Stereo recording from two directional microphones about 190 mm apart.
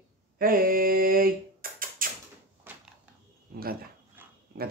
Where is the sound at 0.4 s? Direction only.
50° right (ahead or behind).